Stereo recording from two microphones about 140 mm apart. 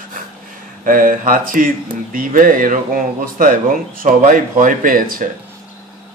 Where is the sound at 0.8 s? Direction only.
80° right.